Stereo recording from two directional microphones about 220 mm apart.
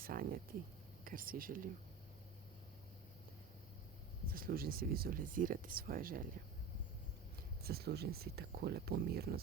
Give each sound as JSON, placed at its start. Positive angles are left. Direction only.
{"t": 0.0, "sound": "a sound", "side_deg": -40}
{"t": 1.0, "sound": "speech", "side_deg": -40}
{"t": 4.3, "sound": "speech", "side_deg": -40}
{"t": 7.6, "sound": "speech", "side_deg": -45}